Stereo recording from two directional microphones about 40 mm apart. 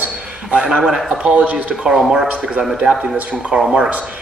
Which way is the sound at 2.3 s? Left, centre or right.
Right.